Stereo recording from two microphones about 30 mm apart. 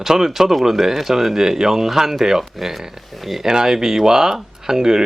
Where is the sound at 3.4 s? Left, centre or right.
Right.